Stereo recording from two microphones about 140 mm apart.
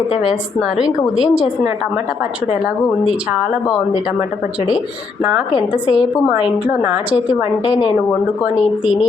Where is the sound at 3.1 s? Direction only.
5° right (ahead or behind).